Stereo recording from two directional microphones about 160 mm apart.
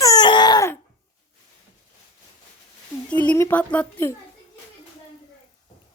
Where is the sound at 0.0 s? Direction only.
25° left (ahead or behind).